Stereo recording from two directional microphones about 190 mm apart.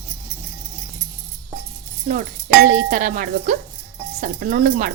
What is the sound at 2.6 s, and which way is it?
Speech, 40° right (ahead or behind).